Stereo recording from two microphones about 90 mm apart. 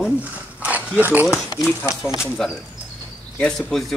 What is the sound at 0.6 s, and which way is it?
Dog, 20° right (ahead or behind).